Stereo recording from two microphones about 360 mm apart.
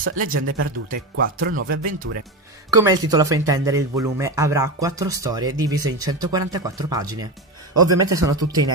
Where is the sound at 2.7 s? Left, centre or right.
Centre.